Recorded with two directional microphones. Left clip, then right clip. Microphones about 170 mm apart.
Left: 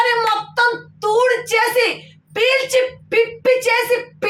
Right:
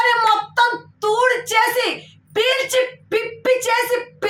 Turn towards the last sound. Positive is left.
turn(degrees=5)  # may be behind; listen again after turning